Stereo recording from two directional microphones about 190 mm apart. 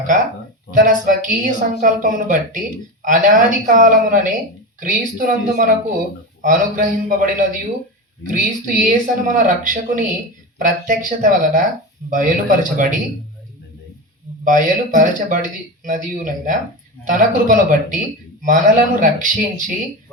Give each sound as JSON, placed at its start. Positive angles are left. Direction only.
{"t": 0.8, "sound": "speech", "side_deg": -45}
{"t": 14.4, "sound": "speech", "side_deg": -40}